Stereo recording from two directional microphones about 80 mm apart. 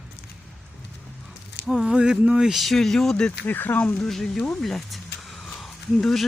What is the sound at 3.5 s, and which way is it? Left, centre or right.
Speech, left.